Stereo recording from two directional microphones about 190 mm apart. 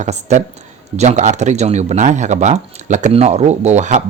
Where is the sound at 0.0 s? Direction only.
40° right (ahead or behind).